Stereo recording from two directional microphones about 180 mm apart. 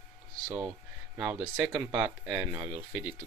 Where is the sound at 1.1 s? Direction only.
15° right (ahead or behind).